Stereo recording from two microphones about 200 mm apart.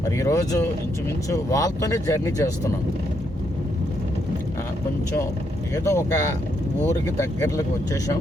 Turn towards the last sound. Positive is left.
turn(degrees=15)  # may be behind; listen again after turning